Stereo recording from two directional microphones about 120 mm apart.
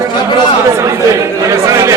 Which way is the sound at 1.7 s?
25° right (ahead or behind).